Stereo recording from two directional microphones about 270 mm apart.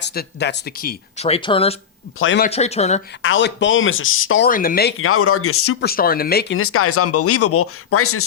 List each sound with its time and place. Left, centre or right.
0.0 s speech: left; by 1.7 s centre
2.1 s speech: left
2.4 s speech: left
3.2 s speech: left
4.4 s speech: left
4.9 s speech: left
5.8 s speech: left
6.6 s speech: left